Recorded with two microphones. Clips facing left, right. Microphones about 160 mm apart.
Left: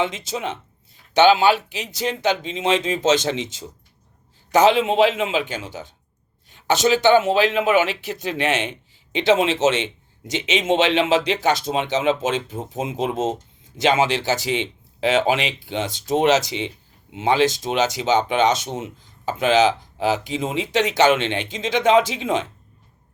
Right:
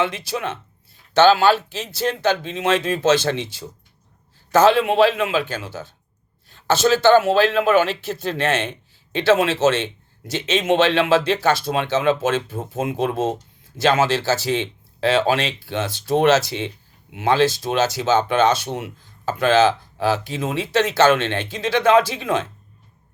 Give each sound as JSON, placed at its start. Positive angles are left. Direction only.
{"t": 0.0, "sound": "a man's voice", "side_deg": 20}